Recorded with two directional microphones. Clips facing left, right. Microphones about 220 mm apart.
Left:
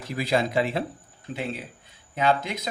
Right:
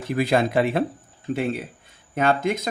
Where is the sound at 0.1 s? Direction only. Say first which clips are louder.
Right 4 dB; 55° right (ahead or behind).